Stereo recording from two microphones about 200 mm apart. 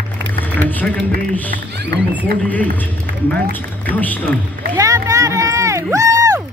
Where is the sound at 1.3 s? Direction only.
10° left (ahead or behind).